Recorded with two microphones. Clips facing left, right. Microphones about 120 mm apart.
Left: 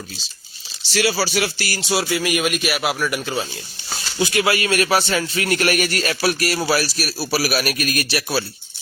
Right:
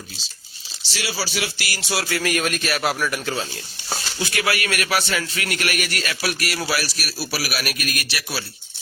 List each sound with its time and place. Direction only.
0.9 s music: 50° left (ahead or behind)
1.8 s speech: 20° left (ahead or behind)
4.2 s speech: 25° left (ahead or behind)